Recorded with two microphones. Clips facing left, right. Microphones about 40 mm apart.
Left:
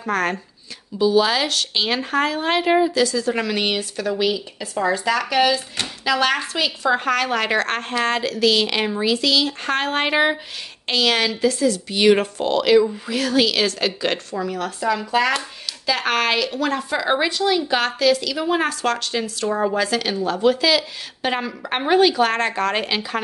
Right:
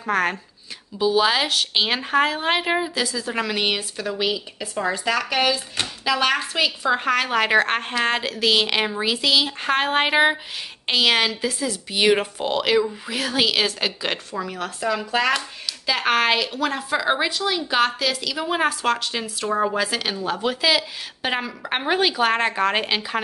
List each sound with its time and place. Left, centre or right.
0.0 s a woman's voice: centre